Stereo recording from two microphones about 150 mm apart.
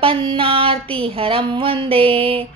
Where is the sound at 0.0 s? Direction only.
35° right (ahead or behind).